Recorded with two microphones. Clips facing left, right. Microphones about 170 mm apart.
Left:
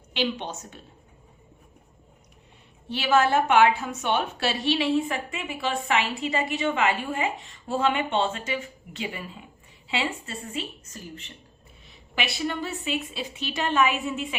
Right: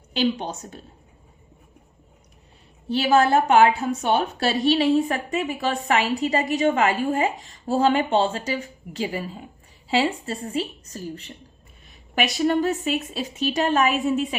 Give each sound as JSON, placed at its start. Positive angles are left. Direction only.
{"t": 0.1, "sound": "a woman's voice", "side_deg": -40}
{"t": 2.9, "sound": "a woman's voice", "side_deg": -35}